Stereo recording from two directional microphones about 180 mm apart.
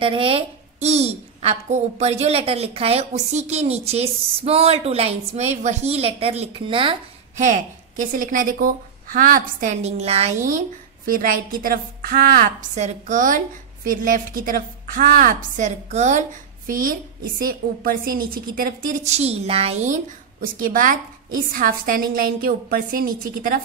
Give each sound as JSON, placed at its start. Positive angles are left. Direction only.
{"t": 0.0, "sound": "a woman's voice", "side_deg": -30}
{"t": 7.3, "sound": "a woman's voice", "side_deg": -40}
{"t": 11.1, "sound": "a woman's voice", "side_deg": -50}